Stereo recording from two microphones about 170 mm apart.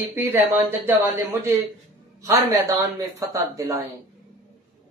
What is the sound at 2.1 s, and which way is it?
Speech, 20° right (ahead or behind).